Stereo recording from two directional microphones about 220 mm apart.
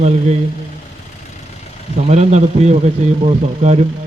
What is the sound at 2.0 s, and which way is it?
A man's voice, 30° right (ahead or behind).